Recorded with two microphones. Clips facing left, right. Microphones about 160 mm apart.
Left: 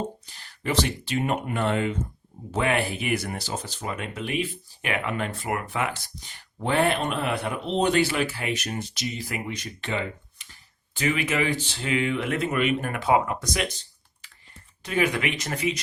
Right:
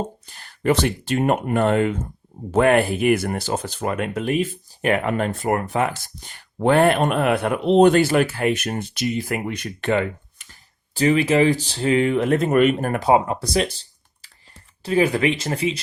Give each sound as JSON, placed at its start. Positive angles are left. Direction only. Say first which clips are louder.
{"t": 0.3, "sound": "speech", "louder": "right 9 dB", "side_deg": -50}
{"t": 10.9, "sound": "speech", "louder": "right 8 dB", "side_deg": -35}